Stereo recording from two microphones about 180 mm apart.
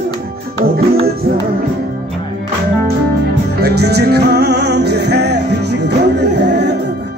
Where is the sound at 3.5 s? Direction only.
65° right (ahead or behind).